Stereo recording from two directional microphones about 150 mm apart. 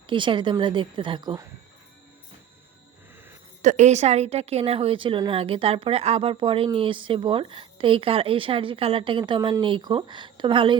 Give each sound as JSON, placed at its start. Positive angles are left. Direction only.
{"t": 0.1, "sound": "a woman's voice", "side_deg": -35}
{"t": 3.6, "sound": "a woman's voice", "side_deg": -55}